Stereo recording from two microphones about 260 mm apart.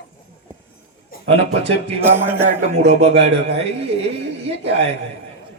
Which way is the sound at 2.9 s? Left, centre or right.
Right.